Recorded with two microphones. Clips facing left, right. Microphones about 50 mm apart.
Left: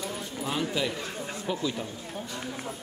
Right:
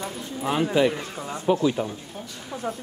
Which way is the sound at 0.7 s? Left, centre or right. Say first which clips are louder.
Right 8 dB; right.